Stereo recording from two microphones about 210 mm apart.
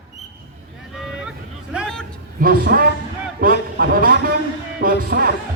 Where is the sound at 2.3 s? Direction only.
45° right (ahead or behind).